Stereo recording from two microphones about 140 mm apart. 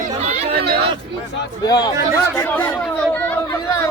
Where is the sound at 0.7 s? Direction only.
40° right (ahead or behind).